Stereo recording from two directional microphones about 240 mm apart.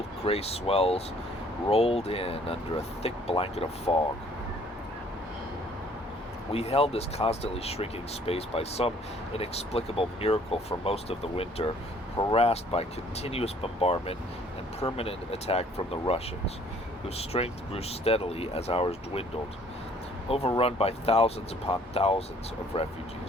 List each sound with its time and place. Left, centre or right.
0.3 s speech: left
6.5 s speech: left
20.3 s speech: left